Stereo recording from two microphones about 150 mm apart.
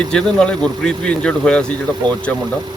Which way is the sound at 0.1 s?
5° left (ahead or behind).